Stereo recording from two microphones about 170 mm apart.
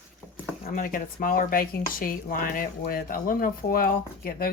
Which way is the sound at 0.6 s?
55° left (ahead or behind).